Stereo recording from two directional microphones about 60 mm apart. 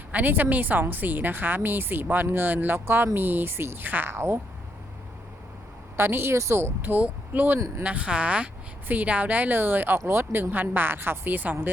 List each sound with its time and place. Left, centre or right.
0.1 s a woman's voice: right
6.0 s a woman's voice: right
6.8 s a woman's voice: right
10.5 s a woman's voice: right